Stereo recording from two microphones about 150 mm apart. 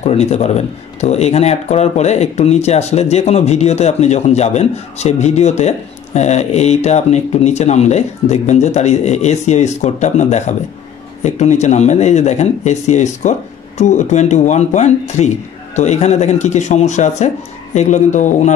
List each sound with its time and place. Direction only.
0.0 s speech: 45° left (ahead or behind)